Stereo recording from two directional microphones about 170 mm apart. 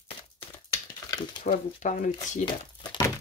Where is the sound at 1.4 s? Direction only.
45° left (ahead or behind).